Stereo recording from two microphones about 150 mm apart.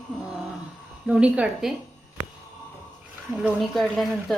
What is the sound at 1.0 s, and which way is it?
Speech, 5° right (ahead or behind).